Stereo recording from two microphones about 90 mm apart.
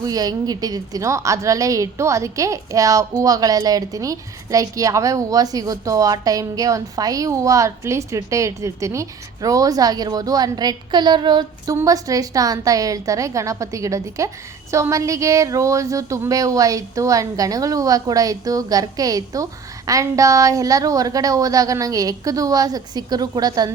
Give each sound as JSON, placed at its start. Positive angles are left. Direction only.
{"t": 0.0, "sound": "a woman's voice", "side_deg": -45}
{"t": 11.9, "sound": "a woman's voice", "side_deg": -40}